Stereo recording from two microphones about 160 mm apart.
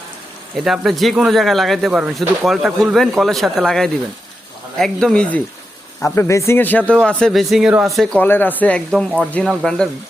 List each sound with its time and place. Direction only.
0.5 s speech: centre (ahead or behind)
6.1 s speech: 20° left (ahead or behind); by 8.2 s centre (ahead or behind)
8.2 s speech: 10° left (ahead or behind)